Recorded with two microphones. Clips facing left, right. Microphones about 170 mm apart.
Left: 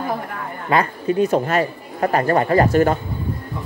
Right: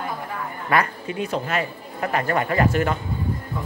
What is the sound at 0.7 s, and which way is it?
Speech, 25° left (ahead or behind).